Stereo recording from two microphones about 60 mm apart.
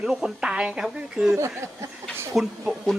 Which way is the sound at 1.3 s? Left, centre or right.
Right.